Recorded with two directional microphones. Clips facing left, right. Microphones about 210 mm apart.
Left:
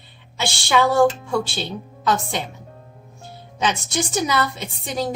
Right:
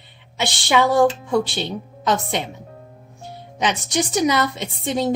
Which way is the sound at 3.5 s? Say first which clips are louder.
Right 2 dB; 15° right (ahead or behind).